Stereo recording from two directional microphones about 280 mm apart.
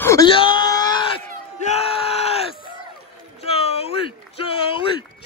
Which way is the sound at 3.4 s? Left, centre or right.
Left.